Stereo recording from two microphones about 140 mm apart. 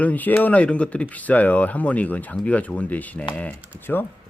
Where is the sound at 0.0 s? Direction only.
10° left (ahead or behind).